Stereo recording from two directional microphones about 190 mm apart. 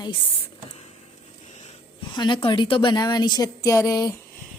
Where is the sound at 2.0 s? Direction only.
25° left (ahead or behind).